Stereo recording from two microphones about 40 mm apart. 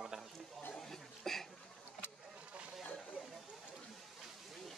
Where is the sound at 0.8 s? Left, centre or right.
Centre.